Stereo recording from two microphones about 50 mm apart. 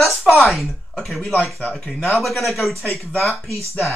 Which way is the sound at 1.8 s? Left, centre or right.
Centre.